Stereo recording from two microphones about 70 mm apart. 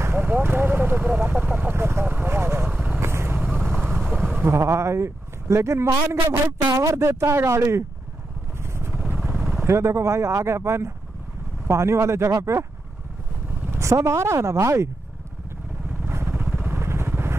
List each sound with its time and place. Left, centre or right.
0.1 s vehicle: right
2.7 s vehicle: right
3.0 s vehicle: right
3.9 s insect: right
4.5 s a man's voice: right
8.5 s vehicle: right
9.3 s vehicle: centre
9.7 s a man's voice: right
13.7 s speech: right
15.9 s vehicle: right